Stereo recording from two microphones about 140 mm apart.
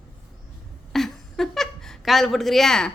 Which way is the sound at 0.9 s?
Centre (ahead or behind).